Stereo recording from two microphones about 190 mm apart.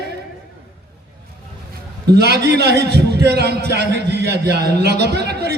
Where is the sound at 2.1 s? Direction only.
60° right (ahead or behind).